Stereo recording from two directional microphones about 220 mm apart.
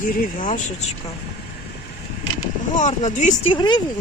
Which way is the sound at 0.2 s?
35° left (ahead or behind).